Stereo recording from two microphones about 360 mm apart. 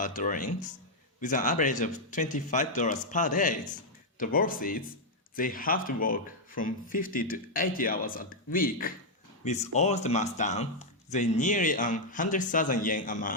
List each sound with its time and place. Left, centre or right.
0.0 s speech: left